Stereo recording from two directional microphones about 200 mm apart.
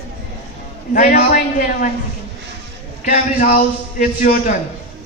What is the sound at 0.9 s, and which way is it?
Speech, 45° left (ahead or behind).